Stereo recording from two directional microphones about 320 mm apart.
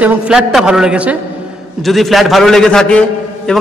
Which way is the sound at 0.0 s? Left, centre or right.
Centre.